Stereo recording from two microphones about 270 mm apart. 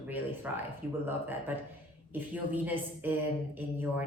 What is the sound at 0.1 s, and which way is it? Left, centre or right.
A woman's voice, centre.